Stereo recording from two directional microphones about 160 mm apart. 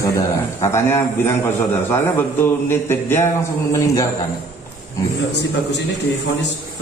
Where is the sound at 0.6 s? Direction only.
15° left (ahead or behind).